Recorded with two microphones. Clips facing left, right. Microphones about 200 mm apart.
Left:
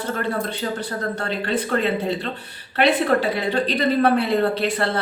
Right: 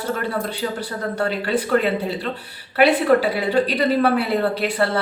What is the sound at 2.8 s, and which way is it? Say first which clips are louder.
A woman's voice: right 3 dB; 10° right (ahead or behind).